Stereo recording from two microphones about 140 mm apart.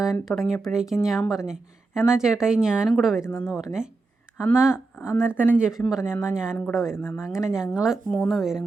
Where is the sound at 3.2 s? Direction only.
15° left (ahead or behind).